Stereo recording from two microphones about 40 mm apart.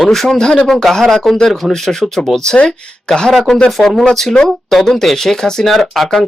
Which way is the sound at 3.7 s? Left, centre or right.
Centre.